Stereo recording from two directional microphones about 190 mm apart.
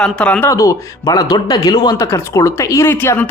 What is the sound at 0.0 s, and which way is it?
A man's voice, 5° left (ahead or behind).